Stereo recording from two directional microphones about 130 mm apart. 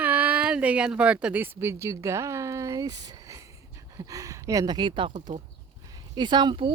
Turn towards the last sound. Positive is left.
turn(degrees=-40)  # may be behind; listen again after turning